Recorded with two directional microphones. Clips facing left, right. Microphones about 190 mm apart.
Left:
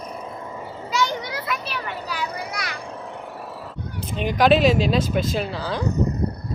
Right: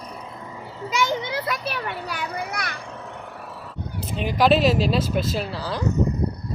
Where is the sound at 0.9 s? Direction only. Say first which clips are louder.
Right 1 dB; 20° right (ahead or behind).